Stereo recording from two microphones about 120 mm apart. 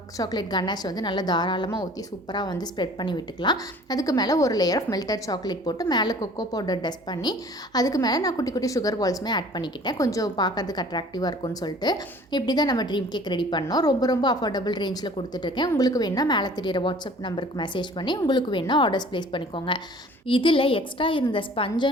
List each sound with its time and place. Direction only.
0.2 s a woman's voice: 35° left (ahead or behind)